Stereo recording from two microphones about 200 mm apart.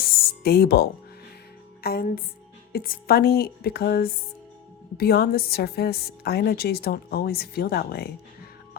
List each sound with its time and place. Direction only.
0.2 s music: 50° left (ahead or behind)
1.8 s a woman's voice: 50° left (ahead or behind)